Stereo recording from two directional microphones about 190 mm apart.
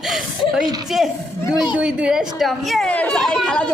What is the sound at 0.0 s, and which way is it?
Speech, centre (ahead or behind).